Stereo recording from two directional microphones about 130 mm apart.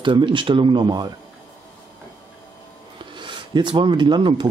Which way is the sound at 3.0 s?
35° right (ahead or behind).